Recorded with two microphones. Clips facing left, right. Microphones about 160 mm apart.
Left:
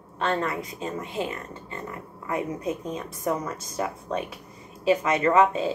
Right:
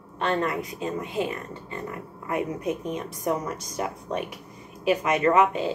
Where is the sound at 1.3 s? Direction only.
20° right (ahead or behind).